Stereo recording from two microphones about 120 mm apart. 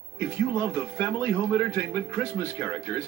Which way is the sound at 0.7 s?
20° left (ahead or behind).